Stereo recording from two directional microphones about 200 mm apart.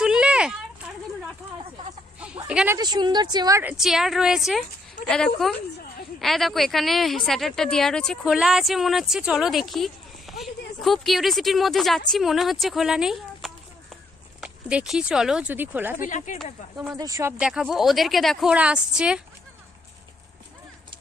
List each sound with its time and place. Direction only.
0.0 s a sound: 5° right (ahead or behind)
2.1 s a sound: 5° right (ahead or behind)
2.7 s a woman's voice: 20° right (ahead or behind)
16.0 s speech: 40° left (ahead or behind)
16.9 s a woman's voice: 15° right (ahead or behind)
17.3 s speech: 5° right (ahead or behind)